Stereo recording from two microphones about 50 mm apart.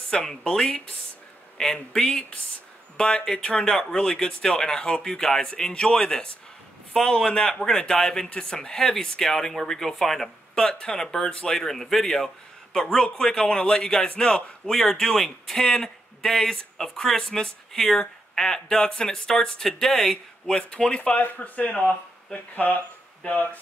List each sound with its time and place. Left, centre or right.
0.1 s speech: centre
13.0 s speech: centre
14.7 s speech: centre; by 23.6 s left